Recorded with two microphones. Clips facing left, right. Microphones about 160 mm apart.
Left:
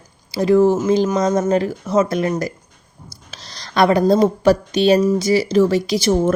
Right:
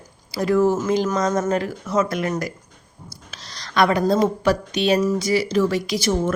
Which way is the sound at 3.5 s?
30° left (ahead or behind).